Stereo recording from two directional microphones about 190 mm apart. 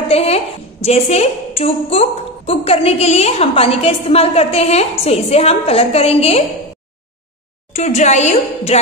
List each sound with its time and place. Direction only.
0.1 s a woman's voice: 30° left (ahead or behind)
7.7 s a woman's voice: 35° left (ahead or behind)